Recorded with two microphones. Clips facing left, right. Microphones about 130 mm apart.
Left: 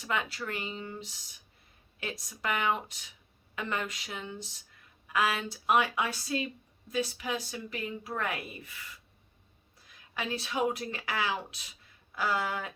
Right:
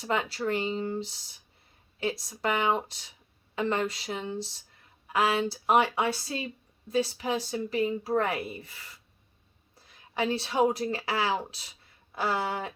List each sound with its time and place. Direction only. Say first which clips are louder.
0.0 s speech: right 5 dB; 30° right (ahead or behind)
10.2 s speech: right 6 dB; 30° right (ahead or behind)